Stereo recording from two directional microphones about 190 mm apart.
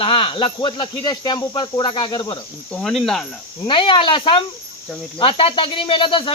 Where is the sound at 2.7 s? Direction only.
Centre (ahead or behind).